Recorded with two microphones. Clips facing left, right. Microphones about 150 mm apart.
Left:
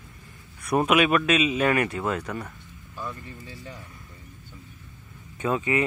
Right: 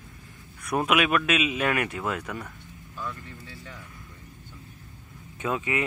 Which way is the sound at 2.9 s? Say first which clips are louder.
Left 1 dB; 15° left (ahead or behind).